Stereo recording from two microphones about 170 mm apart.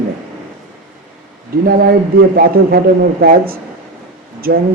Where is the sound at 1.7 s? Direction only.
65° right (ahead or behind).